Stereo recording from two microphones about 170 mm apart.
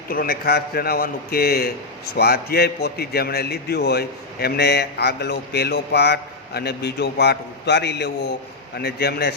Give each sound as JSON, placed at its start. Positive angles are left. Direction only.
{"t": 0.1, "sound": "a man's voice", "side_deg": 60}
{"t": 8.8, "sound": "a man's voice", "side_deg": 65}